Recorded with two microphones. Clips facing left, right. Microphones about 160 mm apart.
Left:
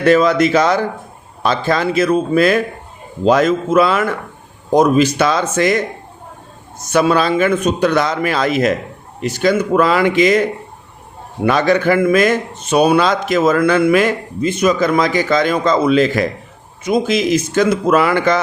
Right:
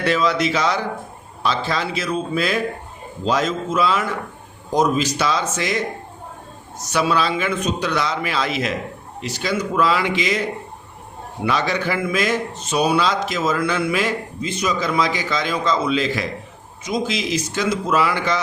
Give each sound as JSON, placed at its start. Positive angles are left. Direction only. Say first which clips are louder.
{"t": 0.0, "sound": "a man's voice", "louder": "left 8 dB", "side_deg": 50}
{"t": 6.8, "sound": "a man's voice", "louder": "left 6 dB", "side_deg": 50}
{"t": 11.4, "sound": "a man's voice", "louder": "left 8 dB", "side_deg": 50}